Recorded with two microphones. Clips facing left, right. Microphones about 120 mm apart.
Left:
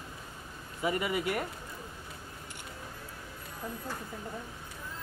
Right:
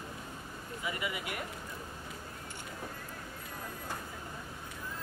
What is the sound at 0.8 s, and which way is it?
Speech, 40° left (ahead or behind).